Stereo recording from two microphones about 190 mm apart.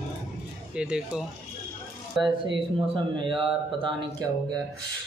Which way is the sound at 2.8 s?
25° right (ahead or behind).